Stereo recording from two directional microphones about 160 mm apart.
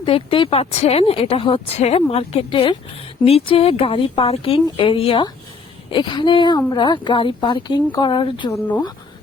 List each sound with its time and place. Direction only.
0.0 s speech: 35° left (ahead or behind)